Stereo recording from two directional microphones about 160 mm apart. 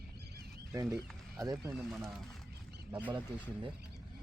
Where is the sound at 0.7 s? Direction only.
15° right (ahead or behind).